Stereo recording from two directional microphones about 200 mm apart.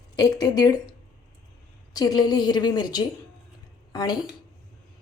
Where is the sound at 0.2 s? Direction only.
20° left (ahead or behind).